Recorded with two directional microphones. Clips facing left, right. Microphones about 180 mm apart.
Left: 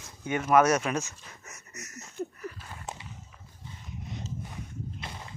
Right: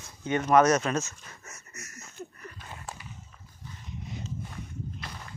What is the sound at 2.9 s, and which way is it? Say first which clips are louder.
Walk: left 3 dB; 20° left (ahead or behind).